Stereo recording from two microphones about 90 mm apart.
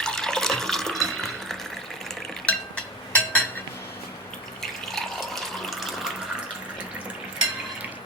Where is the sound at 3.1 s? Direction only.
15° left (ahead or behind).